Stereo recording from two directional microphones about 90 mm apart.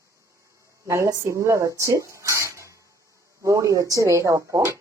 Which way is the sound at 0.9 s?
35° right (ahead or behind).